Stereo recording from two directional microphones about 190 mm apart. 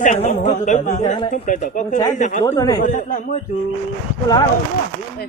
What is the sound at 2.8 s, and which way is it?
Speech, 45° left (ahead or behind).